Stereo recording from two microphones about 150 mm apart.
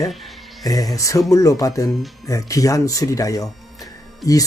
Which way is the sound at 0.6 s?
25° left (ahead or behind).